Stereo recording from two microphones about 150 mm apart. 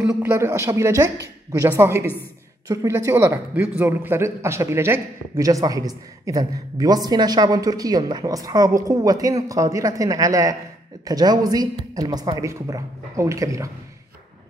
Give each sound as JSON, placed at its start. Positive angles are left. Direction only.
{"t": 0.0, "sound": "a man's voice", "side_deg": -15}